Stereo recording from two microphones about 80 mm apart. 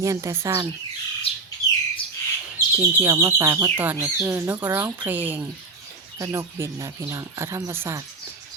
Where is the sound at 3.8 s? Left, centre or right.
Right.